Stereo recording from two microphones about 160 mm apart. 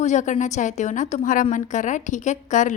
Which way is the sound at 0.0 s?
50° left (ahead or behind).